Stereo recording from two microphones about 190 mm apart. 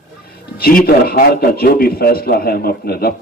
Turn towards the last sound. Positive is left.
turn(degrees=55)  # may be behind; listen again after turning